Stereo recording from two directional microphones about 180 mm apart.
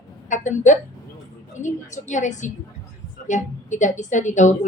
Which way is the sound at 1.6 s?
40° left (ahead or behind).